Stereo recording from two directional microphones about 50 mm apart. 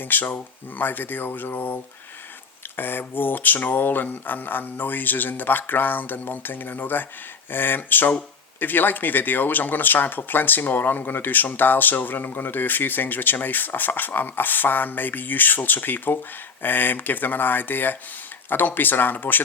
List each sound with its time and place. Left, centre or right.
0.0 s speech: left